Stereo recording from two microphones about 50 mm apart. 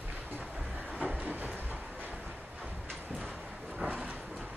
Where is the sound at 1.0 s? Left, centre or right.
Right.